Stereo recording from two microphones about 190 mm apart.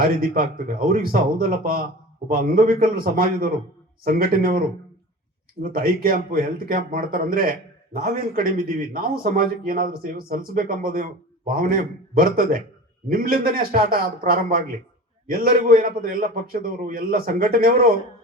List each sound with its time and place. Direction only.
0.2 s speech: 50° right (ahead or behind)
5.6 s speech: 50° right (ahead or behind)